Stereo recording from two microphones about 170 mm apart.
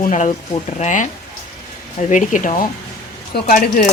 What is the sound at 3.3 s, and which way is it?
Speech, 65° left (ahead or behind).